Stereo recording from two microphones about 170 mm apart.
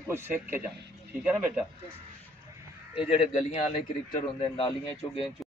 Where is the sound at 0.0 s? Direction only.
15° right (ahead or behind).